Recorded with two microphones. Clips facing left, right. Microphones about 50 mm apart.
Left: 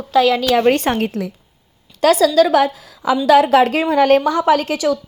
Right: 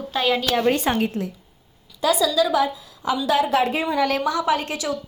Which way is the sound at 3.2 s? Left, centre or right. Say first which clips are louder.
Left 9 dB; left.